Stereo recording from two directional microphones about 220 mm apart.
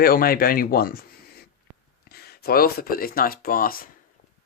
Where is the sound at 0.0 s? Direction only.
40° left (ahead or behind).